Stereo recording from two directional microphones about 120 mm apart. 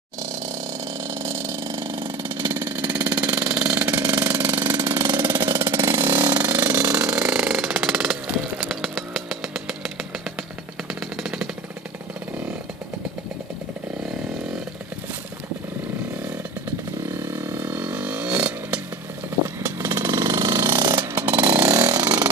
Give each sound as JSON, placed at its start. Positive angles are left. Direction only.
{"t": 1.0, "sound": "vehicle", "side_deg": -25}
{"t": 1.6, "sound": "a sound", "side_deg": -40}
{"t": 2.2, "sound": "engine", "side_deg": -20}
{"t": 6.2, "sound": "a sound", "side_deg": -30}
{"t": 6.5, "sound": "jackhammer", "side_deg": -20}
{"t": 17.0, "sound": "vehicle", "side_deg": -20}
{"t": 20.8, "sound": "chainsaw", "side_deg": -35}
{"t": 21.2, "sound": "chainsaw", "side_deg": -20}
{"t": 21.6, "sound": "chainsaw", "side_deg": -30}